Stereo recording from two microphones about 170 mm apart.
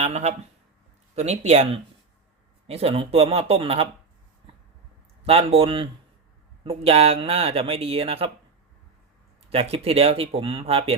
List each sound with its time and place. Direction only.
0.0 s speech: 40° right (ahead or behind)
5.2 s speech: 35° right (ahead or behind)
9.5 s speech: 35° right (ahead or behind)